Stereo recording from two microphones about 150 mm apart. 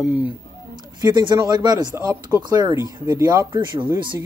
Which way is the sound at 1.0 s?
30° right (ahead or behind).